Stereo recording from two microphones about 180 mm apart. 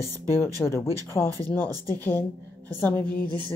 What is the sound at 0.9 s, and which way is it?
Speech, 20° right (ahead or behind).